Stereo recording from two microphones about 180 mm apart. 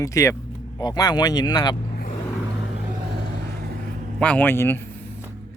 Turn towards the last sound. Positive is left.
turn(degrees=10)  # may be behind; listen again after turning